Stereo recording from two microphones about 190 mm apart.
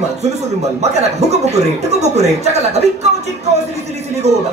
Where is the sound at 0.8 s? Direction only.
35° right (ahead or behind).